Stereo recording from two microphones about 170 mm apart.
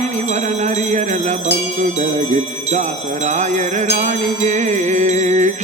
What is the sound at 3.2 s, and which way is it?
Music, 45° right (ahead or behind).